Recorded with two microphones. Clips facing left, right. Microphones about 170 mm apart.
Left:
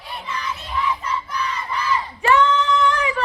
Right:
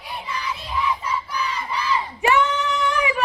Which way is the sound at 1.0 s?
10° right (ahead or behind).